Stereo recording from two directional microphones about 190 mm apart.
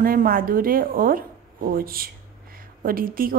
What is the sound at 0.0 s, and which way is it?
A woman's voice, 50° right (ahead or behind).